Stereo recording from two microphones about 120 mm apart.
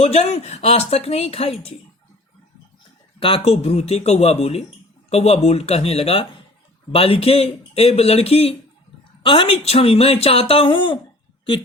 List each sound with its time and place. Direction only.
0.0 s speech: 60° left (ahead or behind)
3.2 s speech: 50° left (ahead or behind)